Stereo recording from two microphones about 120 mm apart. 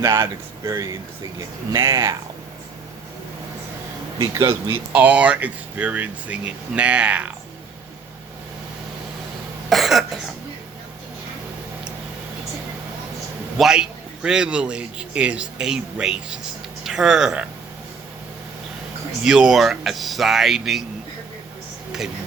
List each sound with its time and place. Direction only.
0.0 s speech: 25° right (ahead or behind)
4.2 s speech: 25° right (ahead or behind)
4.9 s a man's voice: 10° right (ahead or behind)
9.6 s cough: centre (ahead or behind)
13.6 s a man's voice: 5° right (ahead or behind)
19.2 s speech: 5° right (ahead or behind)